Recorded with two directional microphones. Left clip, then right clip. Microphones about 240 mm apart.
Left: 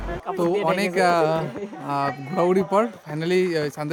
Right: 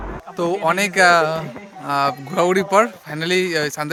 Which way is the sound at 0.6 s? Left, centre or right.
Centre.